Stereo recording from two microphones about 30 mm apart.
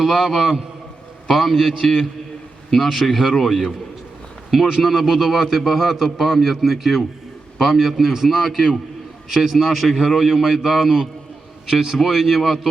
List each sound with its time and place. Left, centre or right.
0.0 s a man's voice: centre
2.6 s a man's voice: centre
3.3 s a man's voice: centre
4.8 s a man's voice: centre
5.1 s a man's voice: centre
9.8 s a man's voice: centre
10.2 s a man's voice: centre
11.7 s a man's voice: right
12.1 s a man's voice: centre